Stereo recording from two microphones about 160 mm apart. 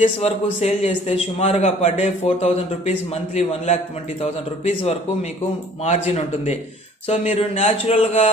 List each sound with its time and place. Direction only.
0.2 s a man's voice: 45° left (ahead or behind)